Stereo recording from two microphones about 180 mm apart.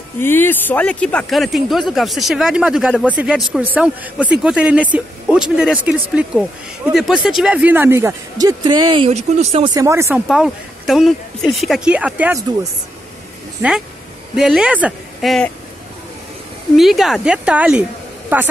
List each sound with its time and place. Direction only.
0.2 s speech: 10° left (ahead or behind); by 9.7 s 35° right (ahead or behind)
9.8 s speech: 15° right (ahead or behind)
10.2 s speech: centre (ahead or behind)
13.6 s a woman's voice: 5° right (ahead or behind)
16.7 s speech: centre (ahead or behind)